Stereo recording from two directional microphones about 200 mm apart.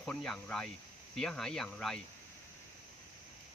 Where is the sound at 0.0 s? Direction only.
Centre (ahead or behind).